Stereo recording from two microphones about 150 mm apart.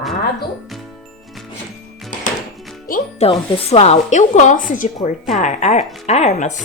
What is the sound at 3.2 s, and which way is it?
A woman's voice, 40° left (ahead or behind).